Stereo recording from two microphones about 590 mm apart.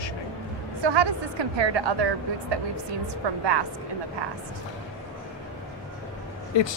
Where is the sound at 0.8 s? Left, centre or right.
Right.